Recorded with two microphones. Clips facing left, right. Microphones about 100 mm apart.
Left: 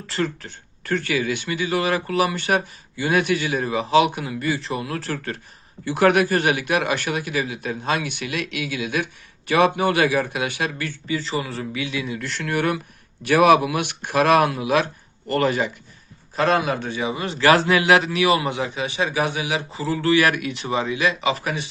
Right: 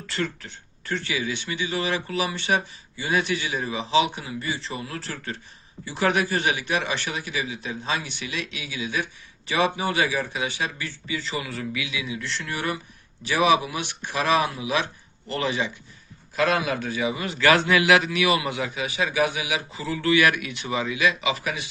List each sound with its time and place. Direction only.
0.1 s speech: 40° left (ahead or behind); by 10.9 s 55° left (ahead or behind)
11.1 s a man's voice: 40° left (ahead or behind)
16.3 s a man's voice: 35° left (ahead or behind)